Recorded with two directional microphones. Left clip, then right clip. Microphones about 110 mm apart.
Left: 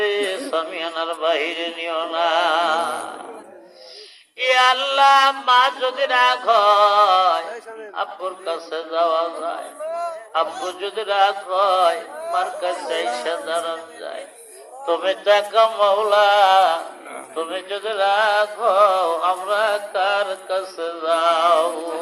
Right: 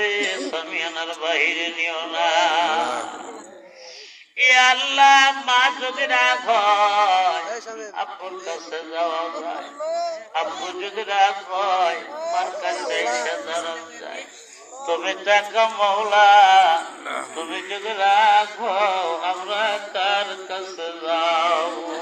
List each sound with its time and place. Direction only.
0.0 s a sound: 35° left (ahead or behind)
4.4 s music: 40° left (ahead or behind)
10.3 s music: 40° left (ahead or behind)
14.8 s music: 40° left (ahead or behind)